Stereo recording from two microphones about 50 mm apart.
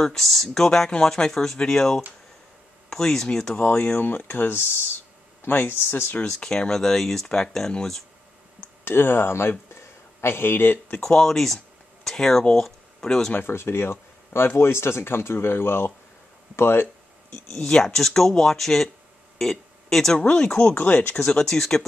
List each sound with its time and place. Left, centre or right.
0.0 s speech: centre
3.5 s speech: left
6.2 s speech: centre
8.8 s speech: left
11.0 s speech: centre
13.3 s speech: left
17.3 s speech: centre
20.7 s speech: left
21.2 s speech: centre